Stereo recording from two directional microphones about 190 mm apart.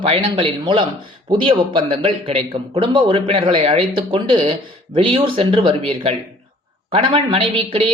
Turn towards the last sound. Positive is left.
turn(degrees=-30)  # may be behind; listen again after turning